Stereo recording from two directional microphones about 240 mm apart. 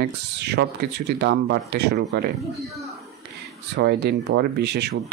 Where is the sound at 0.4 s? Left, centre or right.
Right.